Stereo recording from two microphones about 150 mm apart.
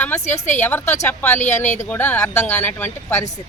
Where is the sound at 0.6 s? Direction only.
15° left (ahead or behind).